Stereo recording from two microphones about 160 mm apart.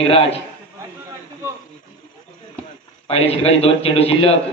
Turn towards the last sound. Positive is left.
turn(degrees=40)  # may be behind; listen again after turning